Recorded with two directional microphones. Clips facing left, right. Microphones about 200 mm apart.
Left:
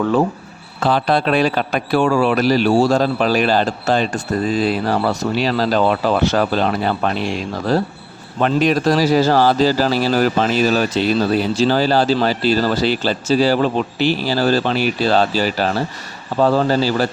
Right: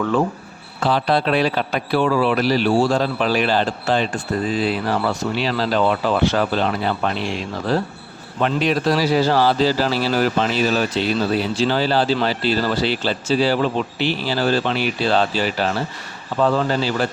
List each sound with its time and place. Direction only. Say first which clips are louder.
0.9 s a man's voice: left 2 dB; 50° left (ahead or behind)